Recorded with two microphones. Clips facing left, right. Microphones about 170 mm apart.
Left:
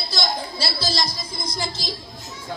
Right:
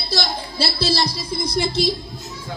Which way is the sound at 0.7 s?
70° right (ahead or behind).